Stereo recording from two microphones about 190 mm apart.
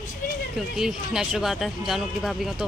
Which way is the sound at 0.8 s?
5° right (ahead or behind).